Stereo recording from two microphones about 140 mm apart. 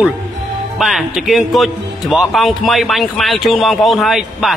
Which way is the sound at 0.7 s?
Centre (ahead or behind).